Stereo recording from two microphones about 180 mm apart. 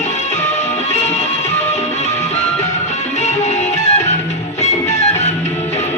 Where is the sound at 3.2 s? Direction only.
40° left (ahead or behind).